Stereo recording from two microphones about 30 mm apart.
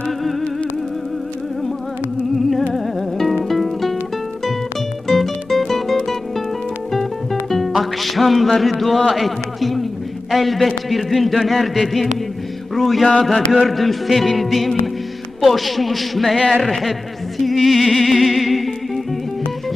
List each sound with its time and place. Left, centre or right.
2.3 s music: centre
5.0 s music: centre
8.5 s a man's voice: centre
12.7 s mantra: centre
13.2 s speech: centre
17.4 s music: centre